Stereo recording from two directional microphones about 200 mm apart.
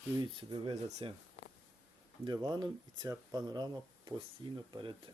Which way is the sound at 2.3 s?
20° right (ahead or behind).